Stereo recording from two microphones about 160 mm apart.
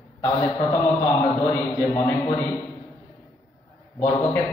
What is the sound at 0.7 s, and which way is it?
A man's voice, 20° left (ahead or behind).